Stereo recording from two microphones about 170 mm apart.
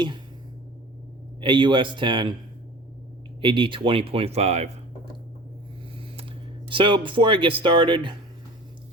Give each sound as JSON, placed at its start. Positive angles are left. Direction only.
{"t": 1.4, "sound": "speech", "side_deg": -30}
{"t": 3.4, "sound": "speech", "side_deg": -30}
{"t": 6.1, "sound": "speech", "side_deg": -30}